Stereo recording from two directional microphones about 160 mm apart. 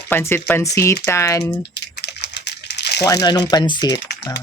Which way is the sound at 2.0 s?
90° left.